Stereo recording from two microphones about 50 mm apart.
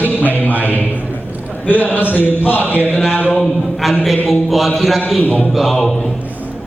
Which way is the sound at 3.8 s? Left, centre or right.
Centre.